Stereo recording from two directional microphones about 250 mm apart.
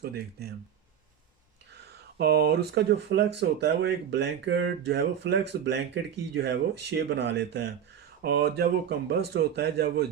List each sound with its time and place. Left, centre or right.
0.0 s a man's voice: right
2.1 s a man's voice: right